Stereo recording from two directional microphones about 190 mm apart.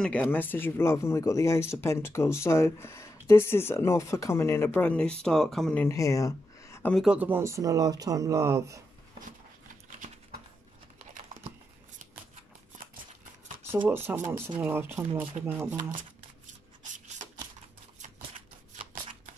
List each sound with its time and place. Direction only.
0.0 s speech: 5° left (ahead or behind)
7.0 s speech: 5° right (ahead or behind)
13.8 s speech: 10° right (ahead or behind)